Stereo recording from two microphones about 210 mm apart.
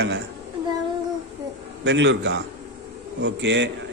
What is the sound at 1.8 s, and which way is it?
A man's voice, 60° right (ahead or behind).